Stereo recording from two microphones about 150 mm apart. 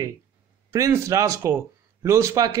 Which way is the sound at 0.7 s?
20° right (ahead or behind).